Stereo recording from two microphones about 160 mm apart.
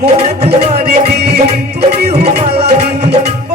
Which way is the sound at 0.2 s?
40° right (ahead or behind).